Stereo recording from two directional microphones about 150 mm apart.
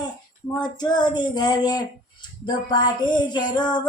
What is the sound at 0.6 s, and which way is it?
A woman's voice, 30° left (ahead or behind).